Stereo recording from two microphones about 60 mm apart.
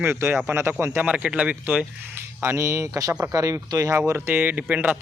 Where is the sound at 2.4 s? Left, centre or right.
Right.